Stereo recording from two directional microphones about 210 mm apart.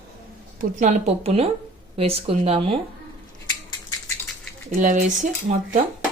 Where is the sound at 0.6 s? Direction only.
35° right (ahead or behind).